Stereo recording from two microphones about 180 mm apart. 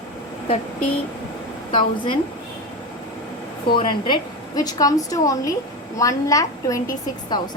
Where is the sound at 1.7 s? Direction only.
25° left (ahead or behind).